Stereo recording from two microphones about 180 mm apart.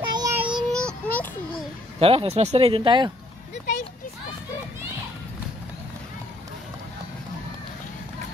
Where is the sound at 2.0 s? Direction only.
30° right (ahead or behind).